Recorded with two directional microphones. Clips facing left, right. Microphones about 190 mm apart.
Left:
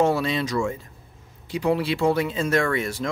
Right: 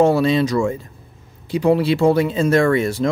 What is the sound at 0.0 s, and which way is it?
Speech, 35° right (ahead or behind).